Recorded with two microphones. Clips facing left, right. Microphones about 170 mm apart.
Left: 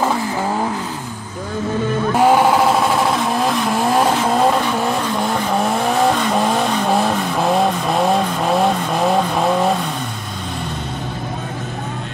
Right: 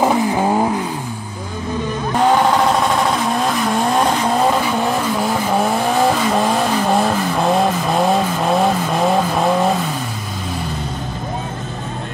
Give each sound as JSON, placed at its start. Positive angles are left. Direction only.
{"t": 0.0, "sound": "vehicle", "side_deg": -15}
{"t": 2.1, "sound": "vehicle", "side_deg": 10}